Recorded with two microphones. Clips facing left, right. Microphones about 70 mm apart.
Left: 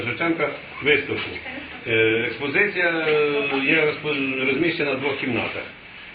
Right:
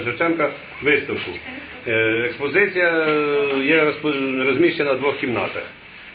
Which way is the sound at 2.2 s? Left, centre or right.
Right.